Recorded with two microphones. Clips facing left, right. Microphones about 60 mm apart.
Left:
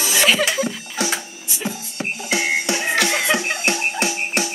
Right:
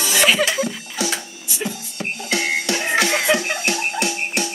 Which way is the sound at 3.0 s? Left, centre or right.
Centre.